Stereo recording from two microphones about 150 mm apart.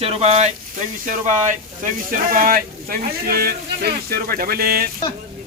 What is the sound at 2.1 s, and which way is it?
Speech, 65° right (ahead or behind).